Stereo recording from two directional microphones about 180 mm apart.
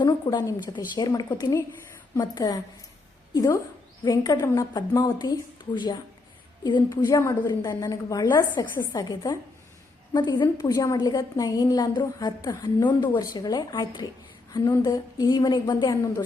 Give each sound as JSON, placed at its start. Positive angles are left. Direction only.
{"t": 0.0, "sound": "a woman's voice", "side_deg": 20}